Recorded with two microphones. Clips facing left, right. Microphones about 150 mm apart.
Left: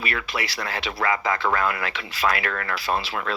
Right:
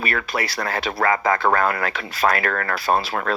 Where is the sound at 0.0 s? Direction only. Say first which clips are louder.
Right 4 dB; 45° right (ahead or behind).